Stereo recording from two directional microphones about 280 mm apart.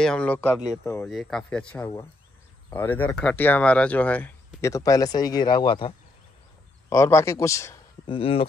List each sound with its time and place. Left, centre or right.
0.0 s speech: centre